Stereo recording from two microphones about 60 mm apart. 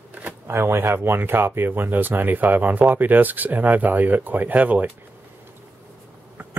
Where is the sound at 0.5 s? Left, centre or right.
Right.